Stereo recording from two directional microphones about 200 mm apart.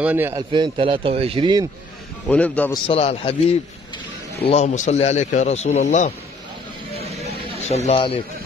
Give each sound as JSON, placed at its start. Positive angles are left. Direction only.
{"t": 0.0, "sound": "a man's voice", "side_deg": -10}
{"t": 0.5, "sound": "speech", "side_deg": -25}
{"t": 2.2, "sound": "a man's voice", "side_deg": 5}
{"t": 2.7, "sound": "a man's voice", "side_deg": 30}
{"t": 7.6, "sound": "speech", "side_deg": 35}